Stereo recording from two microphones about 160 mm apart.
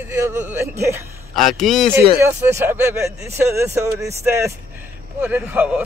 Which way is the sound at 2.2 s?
15° right (ahead or behind).